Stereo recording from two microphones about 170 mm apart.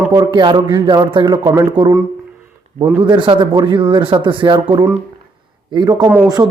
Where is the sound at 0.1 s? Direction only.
25° right (ahead or behind).